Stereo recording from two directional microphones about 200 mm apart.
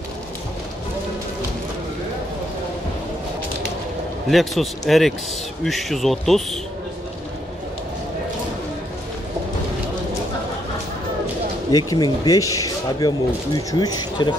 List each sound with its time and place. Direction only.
4.3 s speech: centre (ahead or behind)
11.7 s speech: 15° left (ahead or behind)